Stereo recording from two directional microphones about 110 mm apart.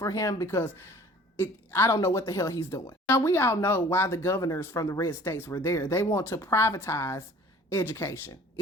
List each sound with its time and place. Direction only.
0.0 s a woman's voice: 30° left (ahead or behind)